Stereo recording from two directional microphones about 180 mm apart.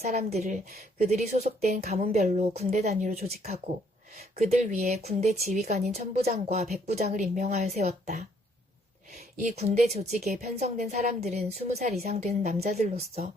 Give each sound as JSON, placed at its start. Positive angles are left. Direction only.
{"t": 0.3, "sound": "speech", "side_deg": -40}
{"t": 9.4, "sound": "speech", "side_deg": -40}